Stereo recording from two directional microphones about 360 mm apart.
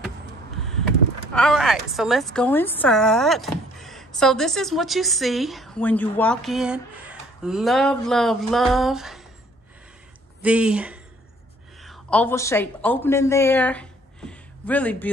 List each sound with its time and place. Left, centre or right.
1.3 s a woman's voice: centre
10.4 s a woman's voice: centre